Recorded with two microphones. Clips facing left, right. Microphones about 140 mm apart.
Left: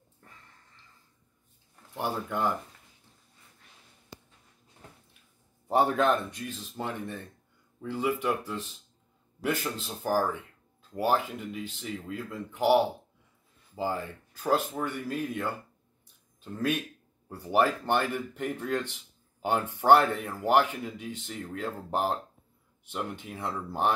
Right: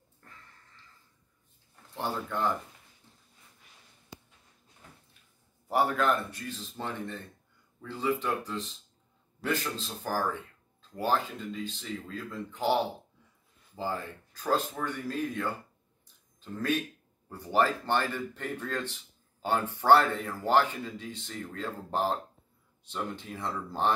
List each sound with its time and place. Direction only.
2.0 s speech: 15° left (ahead or behind)
5.7 s speech: 25° left (ahead or behind)